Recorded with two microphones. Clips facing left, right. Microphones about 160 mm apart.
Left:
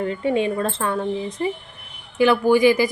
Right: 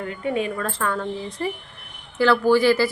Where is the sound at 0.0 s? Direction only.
25° left (ahead or behind).